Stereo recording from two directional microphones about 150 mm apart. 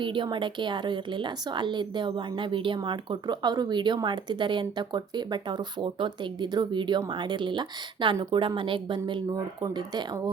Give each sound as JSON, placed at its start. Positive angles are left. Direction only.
{"t": 0.0, "sound": "a woman's voice", "side_deg": -35}